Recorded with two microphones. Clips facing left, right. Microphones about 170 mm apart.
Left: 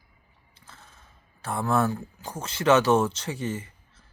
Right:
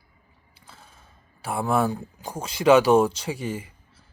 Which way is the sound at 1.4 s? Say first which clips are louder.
Right 2 dB; 10° right (ahead or behind).